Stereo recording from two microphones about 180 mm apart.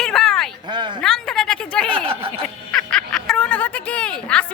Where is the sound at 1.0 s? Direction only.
5° left (ahead or behind).